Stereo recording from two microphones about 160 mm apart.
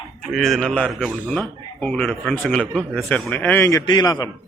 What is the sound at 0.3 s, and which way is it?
A man's voice, centre (ahead or behind).